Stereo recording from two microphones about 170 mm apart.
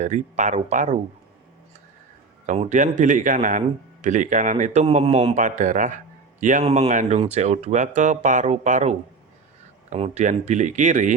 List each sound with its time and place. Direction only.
0.0 s a man's voice: 45° right (ahead or behind)
2.5 s a man's voice: 45° right (ahead or behind)